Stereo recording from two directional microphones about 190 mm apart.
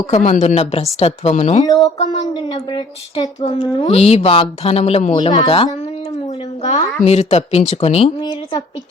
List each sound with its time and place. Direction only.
0.1 s a woman's voice: 40° left (ahead or behind)
1.6 s a woman's voice: 20° left (ahead or behind)